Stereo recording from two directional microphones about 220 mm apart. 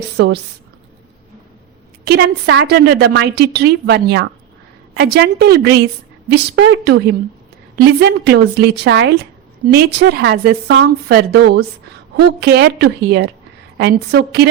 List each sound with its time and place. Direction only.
2.0 s a woman's voice: 50° right (ahead or behind)